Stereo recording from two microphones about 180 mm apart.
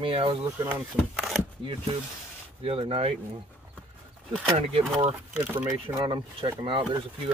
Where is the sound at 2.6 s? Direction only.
30° right (ahead or behind).